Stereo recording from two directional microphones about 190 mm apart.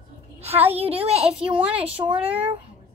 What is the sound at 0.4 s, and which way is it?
A child's voice, 30° right (ahead or behind).